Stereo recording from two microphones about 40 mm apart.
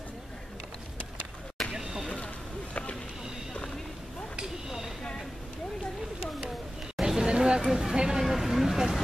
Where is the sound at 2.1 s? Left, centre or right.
Left.